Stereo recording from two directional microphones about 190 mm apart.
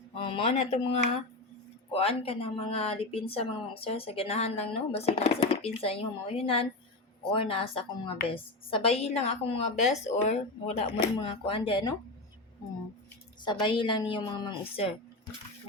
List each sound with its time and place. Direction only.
0.2 s a woman's voice: 30° left (ahead or behind)
13.4 s a woman's voice: 25° left (ahead or behind)